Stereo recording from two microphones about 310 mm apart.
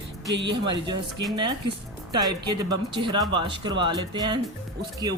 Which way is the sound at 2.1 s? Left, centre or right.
Centre.